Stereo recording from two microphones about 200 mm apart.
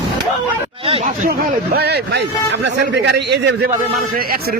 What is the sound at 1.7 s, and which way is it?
A man's voice, 55° right (ahead or behind).